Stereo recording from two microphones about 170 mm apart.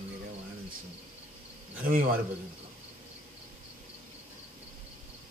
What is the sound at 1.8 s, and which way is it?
Speech, 55° right (ahead or behind).